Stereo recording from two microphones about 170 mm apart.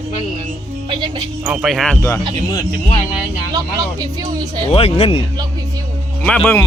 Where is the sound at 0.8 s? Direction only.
30° right (ahead or behind).